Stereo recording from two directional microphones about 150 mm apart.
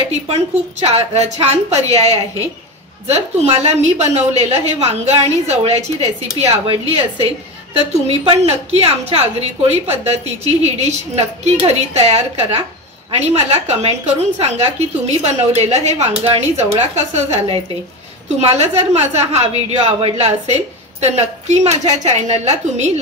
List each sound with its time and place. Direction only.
0.1 s a woman's voice: 45° right (ahead or behind)